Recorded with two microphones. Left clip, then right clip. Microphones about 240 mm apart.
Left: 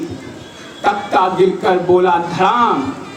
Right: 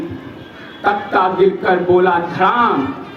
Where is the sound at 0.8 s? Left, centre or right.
Left.